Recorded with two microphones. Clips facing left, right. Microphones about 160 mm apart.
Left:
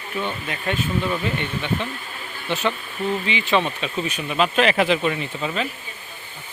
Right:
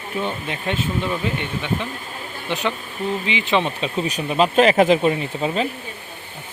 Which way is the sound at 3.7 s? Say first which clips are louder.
Right 3 dB; 30° right (ahead or behind).